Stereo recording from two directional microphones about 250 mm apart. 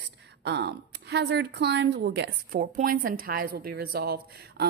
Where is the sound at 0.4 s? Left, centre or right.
Right.